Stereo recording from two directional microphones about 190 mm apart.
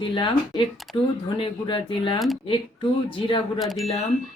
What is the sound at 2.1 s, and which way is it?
Speech, centre (ahead or behind).